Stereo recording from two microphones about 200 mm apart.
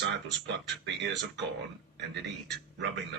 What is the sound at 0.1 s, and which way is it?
Speech, 60° right (ahead or behind).